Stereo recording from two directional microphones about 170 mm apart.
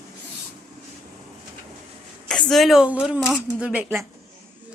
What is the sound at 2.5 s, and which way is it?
Speech, centre (ahead or behind).